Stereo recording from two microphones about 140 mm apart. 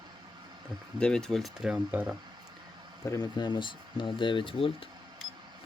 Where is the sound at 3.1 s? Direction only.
30° left (ahead or behind).